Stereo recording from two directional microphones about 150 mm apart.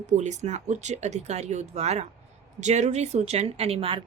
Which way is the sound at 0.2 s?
50° right (ahead or behind).